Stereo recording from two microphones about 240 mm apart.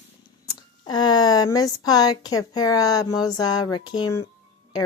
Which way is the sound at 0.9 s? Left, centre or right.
Centre.